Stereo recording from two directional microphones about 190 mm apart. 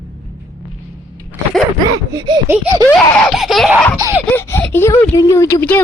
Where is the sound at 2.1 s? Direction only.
20° right (ahead or behind).